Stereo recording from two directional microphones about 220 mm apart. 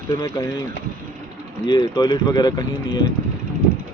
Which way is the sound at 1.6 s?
20° left (ahead or behind).